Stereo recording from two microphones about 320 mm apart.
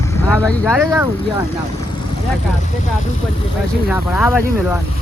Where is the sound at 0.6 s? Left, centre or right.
Centre.